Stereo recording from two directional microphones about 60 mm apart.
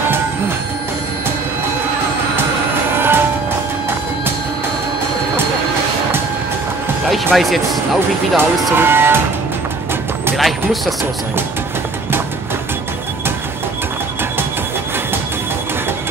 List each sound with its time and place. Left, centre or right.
3.0 s music: right
7.3 s speech: centre
8.7 s speech: right
10.3 s speech: centre